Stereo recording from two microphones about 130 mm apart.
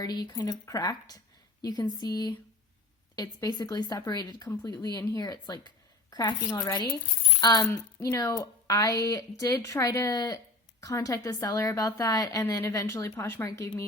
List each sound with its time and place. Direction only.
0.0 s a woman's voice: 30° left (ahead or behind)